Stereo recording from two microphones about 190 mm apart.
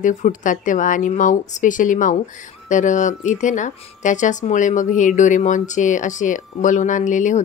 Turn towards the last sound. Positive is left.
turn(degrees=40)  # may be behind; listen again after turning